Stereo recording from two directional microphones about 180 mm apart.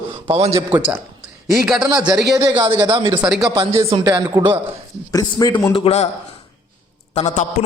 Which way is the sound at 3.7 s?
30° right (ahead or behind).